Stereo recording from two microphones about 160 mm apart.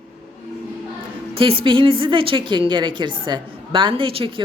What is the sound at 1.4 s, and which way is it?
A woman's voice, 35° right (ahead or behind).